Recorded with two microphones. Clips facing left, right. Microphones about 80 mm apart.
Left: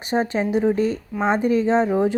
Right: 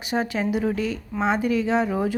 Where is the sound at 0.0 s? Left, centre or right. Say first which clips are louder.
Left 4 dB; left.